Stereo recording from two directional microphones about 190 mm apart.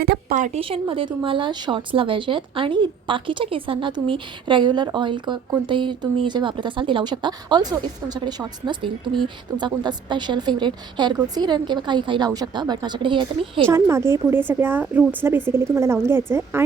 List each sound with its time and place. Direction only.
0.0 s a woman's voice: 55° right (ahead or behind)
0.3 s a woman's voice: 40° right (ahead or behind)
13.7 s a woman's voice: 15° right (ahead or behind)